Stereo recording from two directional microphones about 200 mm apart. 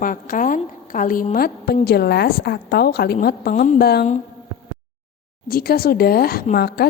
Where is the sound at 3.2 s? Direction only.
40° left (ahead or behind).